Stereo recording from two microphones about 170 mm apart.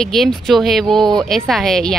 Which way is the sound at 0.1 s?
Centre (ahead or behind).